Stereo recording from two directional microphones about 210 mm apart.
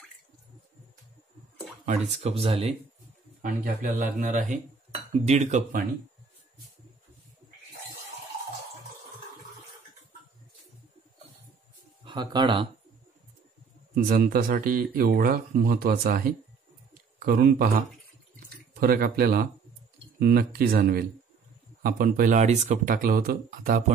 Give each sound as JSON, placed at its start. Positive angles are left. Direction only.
{"t": 1.9, "sound": "speech", "side_deg": -30}
{"t": 3.4, "sound": "speech", "side_deg": -40}
{"t": 12.0, "sound": "speech", "side_deg": -20}
{"t": 13.9, "sound": "speech", "side_deg": -45}